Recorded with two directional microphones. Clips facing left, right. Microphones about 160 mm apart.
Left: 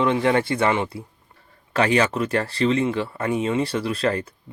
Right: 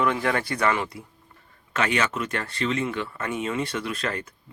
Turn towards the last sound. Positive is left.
turn(degrees=30)  # may be behind; listen again after turning